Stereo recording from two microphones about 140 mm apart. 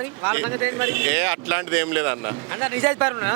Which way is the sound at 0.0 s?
15° right (ahead or behind).